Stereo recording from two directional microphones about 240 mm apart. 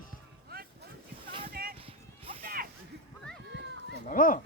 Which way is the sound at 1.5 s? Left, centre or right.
Right.